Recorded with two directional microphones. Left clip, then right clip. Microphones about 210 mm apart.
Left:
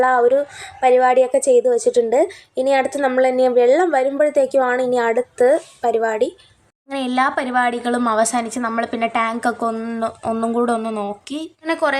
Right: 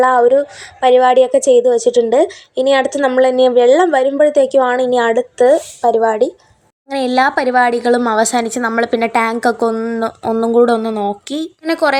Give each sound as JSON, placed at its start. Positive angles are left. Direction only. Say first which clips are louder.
{"t": 0.0, "sound": "a woman's voice", "louder": "right 4 dB", "side_deg": -10}
{"t": 6.9, "sound": "a woman's voice", "louder": "right 5 dB", "side_deg": -25}